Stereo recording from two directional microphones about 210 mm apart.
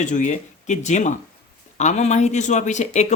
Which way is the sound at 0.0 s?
35° left (ahead or behind).